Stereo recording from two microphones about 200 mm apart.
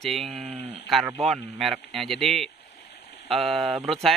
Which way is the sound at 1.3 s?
Centre (ahead or behind).